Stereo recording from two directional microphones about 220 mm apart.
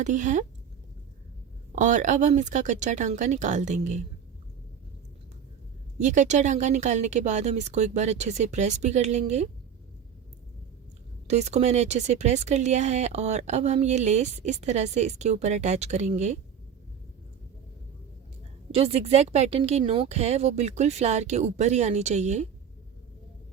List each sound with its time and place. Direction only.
0.0 s speech: 35° right (ahead or behind)
1.7 s speech: 35° right (ahead or behind)
6.0 s speech: 35° right (ahead or behind)
11.3 s speech: 30° right (ahead or behind)
18.7 s speech: 25° right (ahead or behind)